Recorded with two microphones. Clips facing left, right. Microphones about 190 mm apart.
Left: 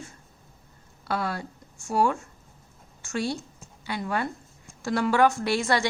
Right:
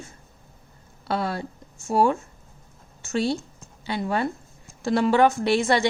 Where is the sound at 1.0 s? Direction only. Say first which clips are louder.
Right 3 dB; 25° right (ahead or behind).